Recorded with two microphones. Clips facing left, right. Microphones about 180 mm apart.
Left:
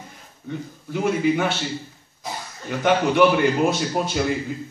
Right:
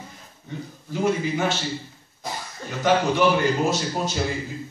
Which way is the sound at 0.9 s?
60° left (ahead or behind).